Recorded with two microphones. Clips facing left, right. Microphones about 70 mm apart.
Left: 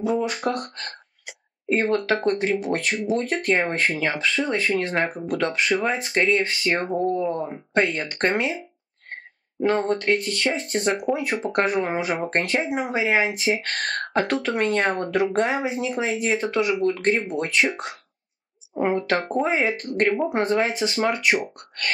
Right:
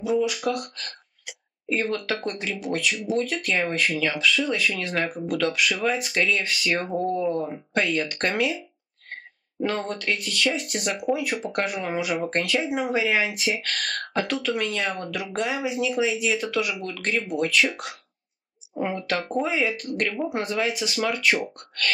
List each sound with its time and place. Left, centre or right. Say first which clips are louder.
0.0 s speech: even; left
9.7 s speech: left 7 dB; left